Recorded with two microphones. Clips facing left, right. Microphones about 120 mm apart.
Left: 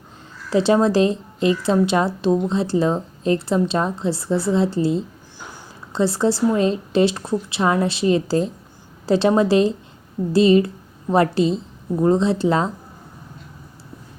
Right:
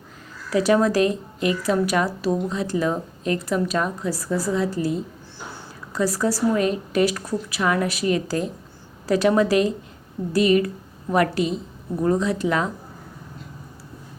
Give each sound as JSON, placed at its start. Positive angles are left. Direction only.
{"t": 0.5, "sound": "a woman's voice", "side_deg": 25}